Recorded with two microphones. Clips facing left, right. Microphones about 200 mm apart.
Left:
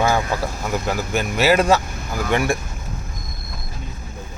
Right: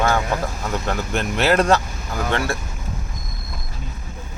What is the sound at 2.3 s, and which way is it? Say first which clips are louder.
Speech: left 4 dB; 15° left (ahead or behind).